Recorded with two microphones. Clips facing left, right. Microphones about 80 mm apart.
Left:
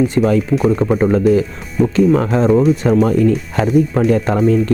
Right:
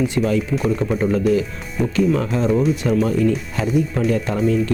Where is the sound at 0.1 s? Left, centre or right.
Left.